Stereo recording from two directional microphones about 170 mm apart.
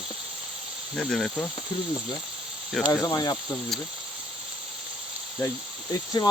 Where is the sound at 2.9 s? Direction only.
20° left (ahead or behind).